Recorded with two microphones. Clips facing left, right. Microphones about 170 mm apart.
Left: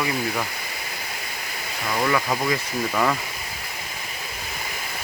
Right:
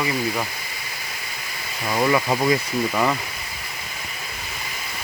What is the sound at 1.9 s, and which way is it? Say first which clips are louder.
Speech: right 3 dB; 20° right (ahead or behind).